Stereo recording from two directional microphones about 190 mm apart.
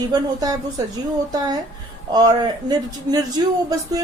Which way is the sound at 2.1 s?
20° right (ahead or behind).